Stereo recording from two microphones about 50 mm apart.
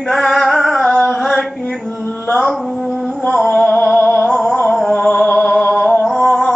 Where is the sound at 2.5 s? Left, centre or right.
Centre.